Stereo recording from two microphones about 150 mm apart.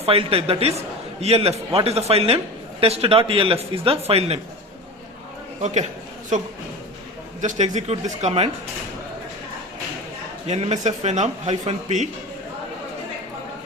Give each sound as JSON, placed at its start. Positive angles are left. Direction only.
{"t": 0.0, "sound": "speech", "side_deg": -40}
{"t": 7.4, "sound": "speech", "side_deg": -50}
{"t": 10.4, "sound": "speech", "side_deg": -45}